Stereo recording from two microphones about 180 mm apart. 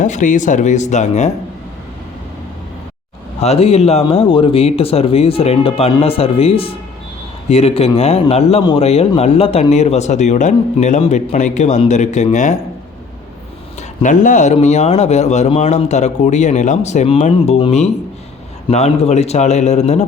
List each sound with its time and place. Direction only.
0.0 s a man's voice: 45° left (ahead or behind)
3.4 s a man's voice: 35° left (ahead or behind)
14.0 s a man's voice: 45° left (ahead or behind)